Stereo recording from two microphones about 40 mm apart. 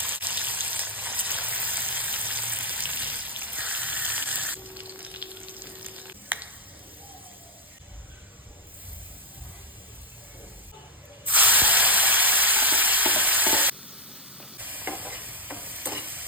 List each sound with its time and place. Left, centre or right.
0.0 s water: right
11.3 s a sound: right
14.6 s stir: right